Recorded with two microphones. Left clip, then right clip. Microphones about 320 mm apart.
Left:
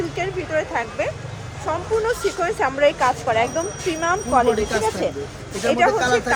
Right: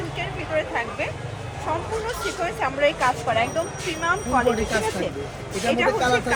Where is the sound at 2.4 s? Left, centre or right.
Left.